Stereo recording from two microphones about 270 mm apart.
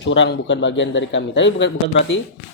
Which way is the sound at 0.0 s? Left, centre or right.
Left.